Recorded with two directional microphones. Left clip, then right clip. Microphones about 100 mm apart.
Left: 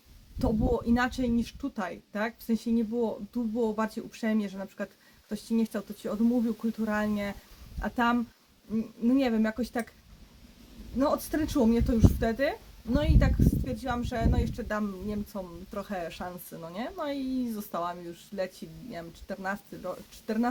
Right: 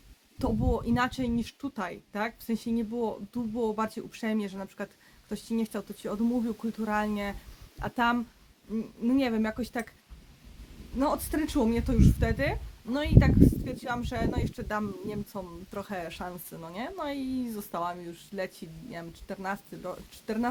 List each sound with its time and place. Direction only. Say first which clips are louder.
0.3 s a woman's voice: left 2 dB; 15° right (ahead or behind)
10.9 s a woman's voice: left 1 dB; 15° right (ahead or behind)